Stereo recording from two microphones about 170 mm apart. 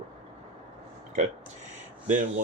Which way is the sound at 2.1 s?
50° right (ahead or behind).